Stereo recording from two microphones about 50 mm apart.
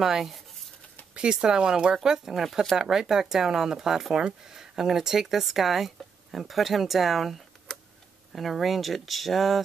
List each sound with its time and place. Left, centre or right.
0.0 s speech: centre
1.1 s speech: centre